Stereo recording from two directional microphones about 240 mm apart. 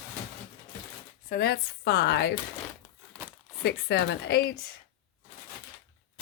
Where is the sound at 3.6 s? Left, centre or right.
Left.